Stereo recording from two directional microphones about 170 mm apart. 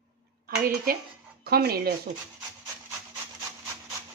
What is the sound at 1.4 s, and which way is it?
Speech, 65° right (ahead or behind).